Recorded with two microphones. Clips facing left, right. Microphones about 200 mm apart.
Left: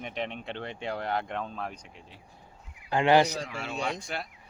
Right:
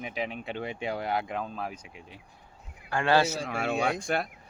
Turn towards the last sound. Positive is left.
turn(degrees=-50)  # may be behind; listen again after turning